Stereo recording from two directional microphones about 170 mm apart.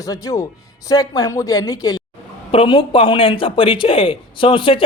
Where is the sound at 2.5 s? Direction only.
30° left (ahead or behind).